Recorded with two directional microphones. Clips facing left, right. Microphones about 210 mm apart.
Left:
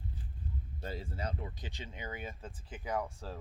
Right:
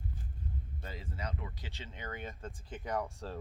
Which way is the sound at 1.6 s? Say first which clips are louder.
Left 1 dB; 15° left (ahead or behind).